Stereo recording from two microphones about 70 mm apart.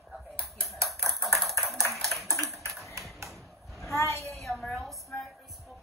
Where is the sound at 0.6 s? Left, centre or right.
Centre.